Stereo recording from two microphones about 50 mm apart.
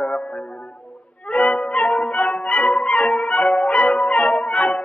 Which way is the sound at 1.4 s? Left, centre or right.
Left.